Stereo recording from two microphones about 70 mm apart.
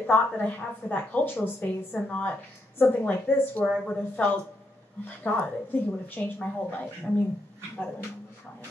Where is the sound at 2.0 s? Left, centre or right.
Left.